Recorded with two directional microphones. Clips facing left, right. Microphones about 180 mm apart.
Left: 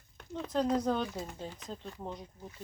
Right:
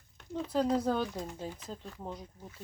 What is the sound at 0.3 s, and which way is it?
Speech, 5° right (ahead or behind).